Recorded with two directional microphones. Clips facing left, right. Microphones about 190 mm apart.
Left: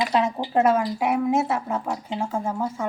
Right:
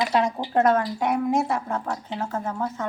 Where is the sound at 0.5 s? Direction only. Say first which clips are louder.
Even; 10° left (ahead or behind).